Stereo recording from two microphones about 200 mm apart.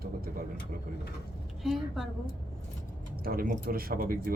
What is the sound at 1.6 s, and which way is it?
Speech, centre (ahead or behind).